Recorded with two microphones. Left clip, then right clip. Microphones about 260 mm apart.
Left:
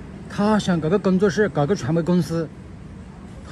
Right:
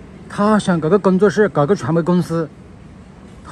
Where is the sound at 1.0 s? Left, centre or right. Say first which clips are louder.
Right 6 dB; centre.